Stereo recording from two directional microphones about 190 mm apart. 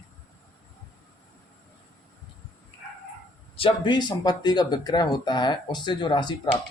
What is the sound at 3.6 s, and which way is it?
Speech, 25° left (ahead or behind).